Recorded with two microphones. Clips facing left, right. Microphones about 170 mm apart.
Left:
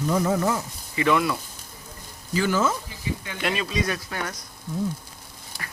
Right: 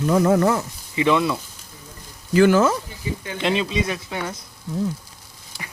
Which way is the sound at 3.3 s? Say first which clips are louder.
Right 5 dB; 25° right (ahead or behind).